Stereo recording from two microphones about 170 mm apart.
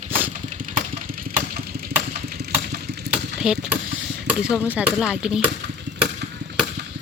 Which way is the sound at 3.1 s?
5° right (ahead or behind).